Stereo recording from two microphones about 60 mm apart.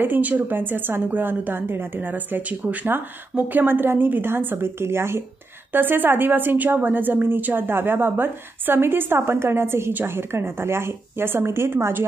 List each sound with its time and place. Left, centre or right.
0.0 s a woman's voice: right